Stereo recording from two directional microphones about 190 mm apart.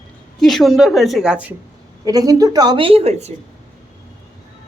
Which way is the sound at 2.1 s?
20° right (ahead or behind).